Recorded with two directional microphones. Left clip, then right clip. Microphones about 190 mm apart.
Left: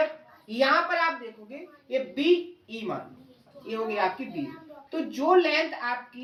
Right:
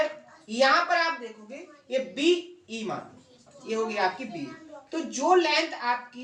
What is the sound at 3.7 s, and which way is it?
A woman's voice, 15° right (ahead or behind).